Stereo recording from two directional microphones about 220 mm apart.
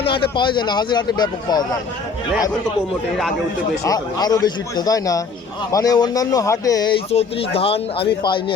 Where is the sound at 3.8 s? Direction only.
15° left (ahead or behind).